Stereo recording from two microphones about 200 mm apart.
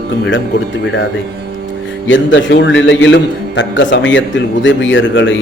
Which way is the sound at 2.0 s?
70° left (ahead or behind).